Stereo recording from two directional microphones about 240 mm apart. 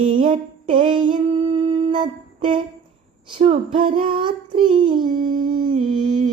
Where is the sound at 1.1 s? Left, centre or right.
Right.